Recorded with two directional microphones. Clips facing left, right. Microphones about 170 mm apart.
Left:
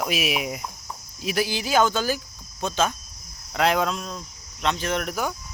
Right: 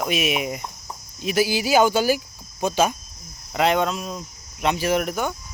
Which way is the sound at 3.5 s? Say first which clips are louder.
Right 2 dB; centre (ahead or behind).